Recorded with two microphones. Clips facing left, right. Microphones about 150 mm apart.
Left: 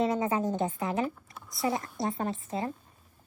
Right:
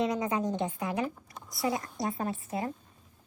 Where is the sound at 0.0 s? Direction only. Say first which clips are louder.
Left 2 dB; 30° left (ahead or behind).